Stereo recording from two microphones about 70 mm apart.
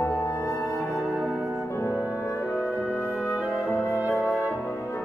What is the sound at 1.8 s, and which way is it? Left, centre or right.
Music, left.